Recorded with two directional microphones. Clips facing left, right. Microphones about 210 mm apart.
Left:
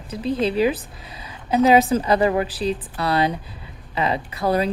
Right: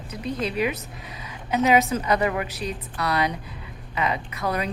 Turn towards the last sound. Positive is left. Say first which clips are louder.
# left 6 dB
turn(degrees=30)  # may be behind; listen again after turning